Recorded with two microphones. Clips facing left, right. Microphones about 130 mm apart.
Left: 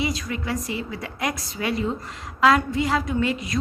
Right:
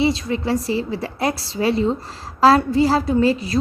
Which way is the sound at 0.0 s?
30° right (ahead or behind).